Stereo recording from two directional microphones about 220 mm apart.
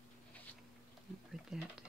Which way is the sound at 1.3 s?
Centre (ahead or behind).